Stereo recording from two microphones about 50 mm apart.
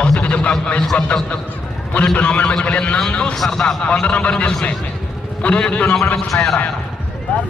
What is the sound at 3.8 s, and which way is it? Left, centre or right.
A man's voice, left.